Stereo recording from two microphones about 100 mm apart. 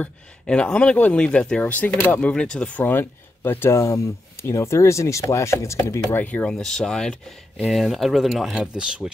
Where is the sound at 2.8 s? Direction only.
20° left (ahead or behind).